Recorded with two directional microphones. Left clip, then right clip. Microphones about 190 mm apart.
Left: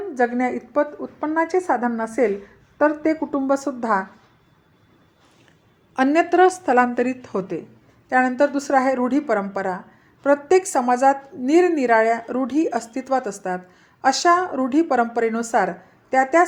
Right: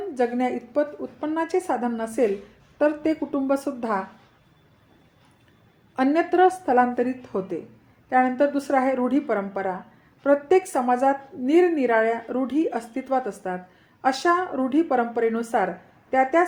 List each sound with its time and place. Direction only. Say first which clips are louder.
0.1 s a woman's voice: left 3 dB; 25° left (ahead or behind)
6.0 s a woman's voice: left 3 dB; 30° left (ahead or behind)